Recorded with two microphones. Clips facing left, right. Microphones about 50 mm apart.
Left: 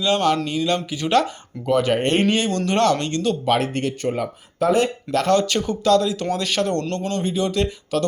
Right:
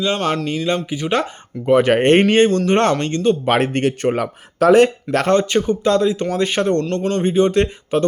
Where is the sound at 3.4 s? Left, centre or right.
Right.